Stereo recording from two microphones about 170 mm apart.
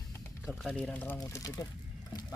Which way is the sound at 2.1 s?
25° left (ahead or behind).